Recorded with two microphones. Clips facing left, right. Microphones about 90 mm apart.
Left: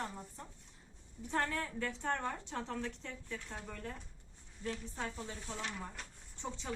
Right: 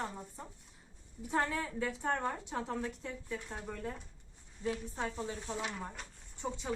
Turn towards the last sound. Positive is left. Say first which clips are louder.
# right 4 dB
turn(degrees=-5)  # may be behind; listen again after turning